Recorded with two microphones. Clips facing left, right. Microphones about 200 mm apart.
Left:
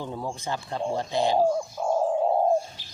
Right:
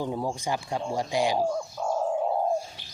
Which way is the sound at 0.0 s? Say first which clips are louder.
Right 3 dB; 10° right (ahead or behind).